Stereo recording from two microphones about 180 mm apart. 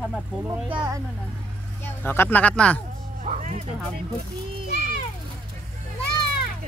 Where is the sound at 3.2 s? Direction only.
40° right (ahead or behind).